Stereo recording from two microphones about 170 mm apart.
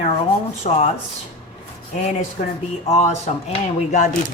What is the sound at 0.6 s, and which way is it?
Speech, 35° left (ahead or behind).